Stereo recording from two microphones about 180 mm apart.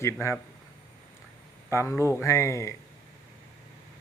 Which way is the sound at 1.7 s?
15° left (ahead or behind).